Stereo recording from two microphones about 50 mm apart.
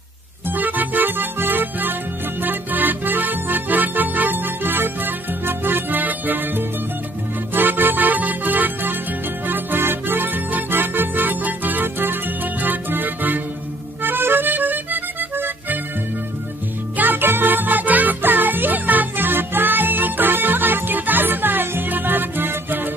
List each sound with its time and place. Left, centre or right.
0.5 s music: right
16.9 s music: right